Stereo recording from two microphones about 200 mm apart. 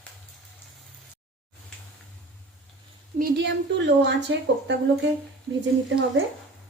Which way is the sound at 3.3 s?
60° right (ahead or behind).